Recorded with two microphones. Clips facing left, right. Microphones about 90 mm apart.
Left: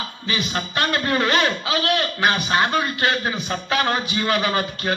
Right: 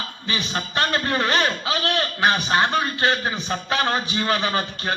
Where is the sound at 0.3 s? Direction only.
30° right (ahead or behind).